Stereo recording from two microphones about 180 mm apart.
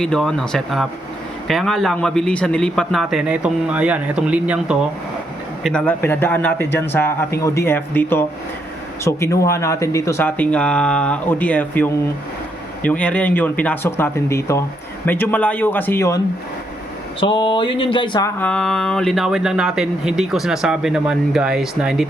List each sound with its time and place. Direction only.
0.0 s speech: 5° left (ahead or behind)
5.6 s speech: 5° left (ahead or behind)
17.2 s speech: 30° left (ahead or behind)
18.3 s speech: 5° left (ahead or behind)